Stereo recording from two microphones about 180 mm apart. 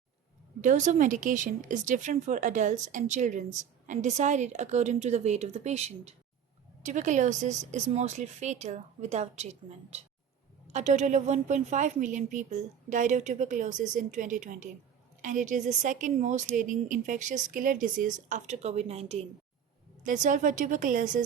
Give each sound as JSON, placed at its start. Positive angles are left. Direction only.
{"t": 0.6, "sound": "a woman's voice", "side_deg": -45}